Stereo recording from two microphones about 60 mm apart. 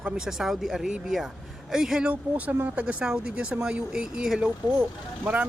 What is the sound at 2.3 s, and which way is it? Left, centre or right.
Speech, right.